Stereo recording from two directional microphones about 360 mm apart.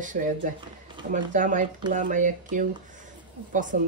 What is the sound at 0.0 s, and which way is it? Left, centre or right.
Speech, right.